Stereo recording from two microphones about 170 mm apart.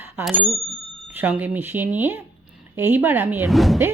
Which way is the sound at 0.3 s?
Centre (ahead or behind).